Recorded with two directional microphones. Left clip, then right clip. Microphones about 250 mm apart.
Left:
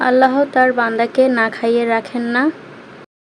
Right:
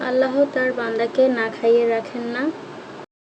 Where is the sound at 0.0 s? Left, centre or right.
Left.